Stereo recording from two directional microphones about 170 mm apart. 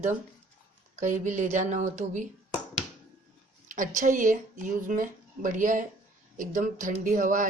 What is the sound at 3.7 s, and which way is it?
Speech, 50° right (ahead or behind).